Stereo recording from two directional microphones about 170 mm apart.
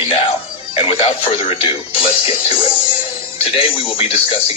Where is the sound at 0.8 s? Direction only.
35° left (ahead or behind).